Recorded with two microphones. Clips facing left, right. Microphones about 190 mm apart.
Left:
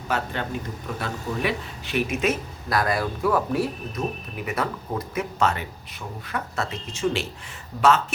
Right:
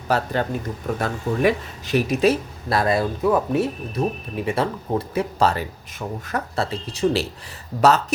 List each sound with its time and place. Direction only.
0.1 s speech: 35° right (ahead or behind)